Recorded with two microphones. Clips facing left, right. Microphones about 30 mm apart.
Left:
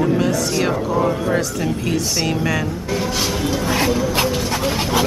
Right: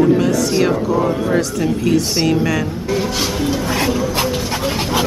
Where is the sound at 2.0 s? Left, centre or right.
Centre.